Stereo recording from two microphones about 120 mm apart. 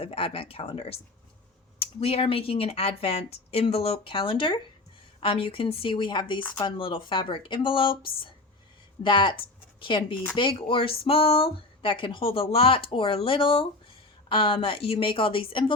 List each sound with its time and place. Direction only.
0.0 s speech: 50° left (ahead or behind)